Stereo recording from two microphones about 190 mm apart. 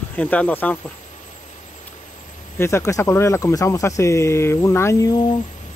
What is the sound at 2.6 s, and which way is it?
Speech, 15° left (ahead or behind).